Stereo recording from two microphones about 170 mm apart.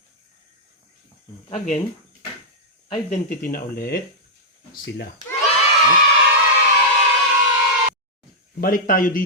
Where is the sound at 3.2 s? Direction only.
60° left (ahead or behind).